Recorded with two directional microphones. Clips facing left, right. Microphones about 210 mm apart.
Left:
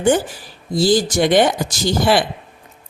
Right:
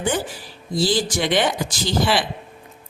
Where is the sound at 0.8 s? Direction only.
45° left (ahead or behind).